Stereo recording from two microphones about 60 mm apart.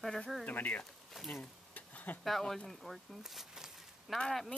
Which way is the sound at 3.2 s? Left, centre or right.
Centre.